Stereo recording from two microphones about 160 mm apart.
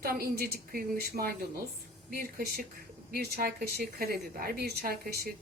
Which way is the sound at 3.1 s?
85° right.